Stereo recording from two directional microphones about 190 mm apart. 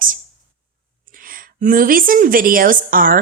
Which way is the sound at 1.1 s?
45° right (ahead or behind).